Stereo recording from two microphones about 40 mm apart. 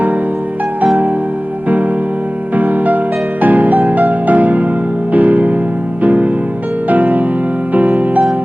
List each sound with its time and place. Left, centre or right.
2.6 s music: right